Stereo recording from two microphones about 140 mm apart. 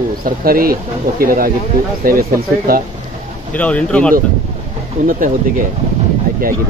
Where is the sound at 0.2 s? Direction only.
90° right.